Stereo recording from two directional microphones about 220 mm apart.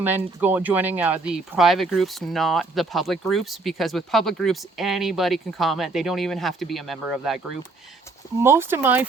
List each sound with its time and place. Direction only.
0.3 s speech: 10° right (ahead or behind)
8.4 s speech: 10° right (ahead or behind)